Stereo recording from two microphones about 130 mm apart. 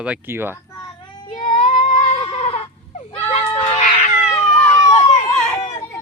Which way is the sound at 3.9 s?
50° left (ahead or behind).